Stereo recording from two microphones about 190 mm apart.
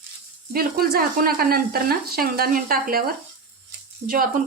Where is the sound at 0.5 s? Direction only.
50° right (ahead or behind).